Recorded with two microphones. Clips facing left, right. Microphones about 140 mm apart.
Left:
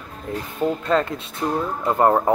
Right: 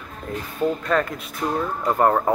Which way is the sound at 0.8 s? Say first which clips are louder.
Left 2 dB; 25° left (ahead or behind).